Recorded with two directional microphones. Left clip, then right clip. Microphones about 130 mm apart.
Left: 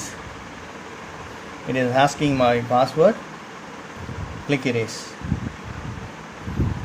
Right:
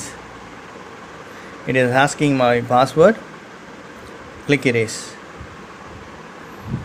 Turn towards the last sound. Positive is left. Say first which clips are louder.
# right 6 dB
turn(degrees=-55)  # may be behind; listen again after turning